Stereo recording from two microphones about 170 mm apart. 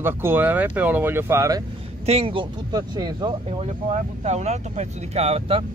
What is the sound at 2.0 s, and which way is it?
Speech, 35° right (ahead or behind).